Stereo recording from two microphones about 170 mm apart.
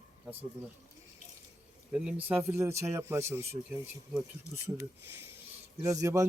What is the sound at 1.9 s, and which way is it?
Speech, 10° right (ahead or behind).